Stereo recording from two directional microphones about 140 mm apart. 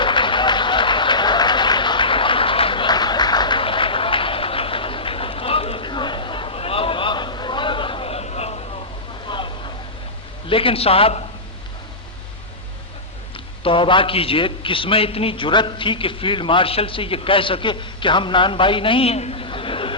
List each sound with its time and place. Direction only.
0.0 s applause: 35° left (ahead or behind)
9.2 s vehicle: 35° left (ahead or behind)
10.5 s a man's voice: 40° left (ahead or behind)
13.7 s a man's voice: 35° left (ahead or behind)